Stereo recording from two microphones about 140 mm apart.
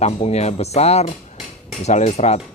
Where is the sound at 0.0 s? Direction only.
50° left (ahead or behind).